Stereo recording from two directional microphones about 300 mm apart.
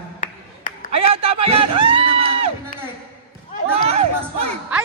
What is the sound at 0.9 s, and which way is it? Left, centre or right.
A man's voice, centre.